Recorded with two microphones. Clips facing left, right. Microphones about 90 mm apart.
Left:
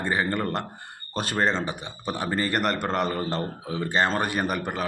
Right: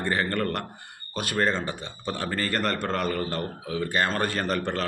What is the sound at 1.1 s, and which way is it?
Speech, 35° left (ahead or behind).